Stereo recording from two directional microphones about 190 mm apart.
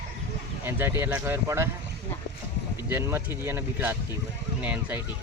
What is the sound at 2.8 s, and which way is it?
Speech, 10° right (ahead or behind).